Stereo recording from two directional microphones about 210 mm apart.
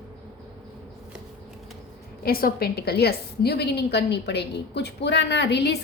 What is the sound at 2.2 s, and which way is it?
A woman's voice, 45° left (ahead or behind).